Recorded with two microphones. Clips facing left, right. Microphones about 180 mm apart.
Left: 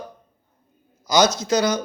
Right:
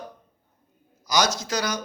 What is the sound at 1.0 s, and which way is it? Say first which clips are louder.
Speech: left 6 dB; 25° left (ahead or behind).